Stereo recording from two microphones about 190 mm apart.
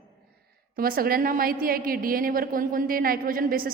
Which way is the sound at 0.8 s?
50° right (ahead or behind).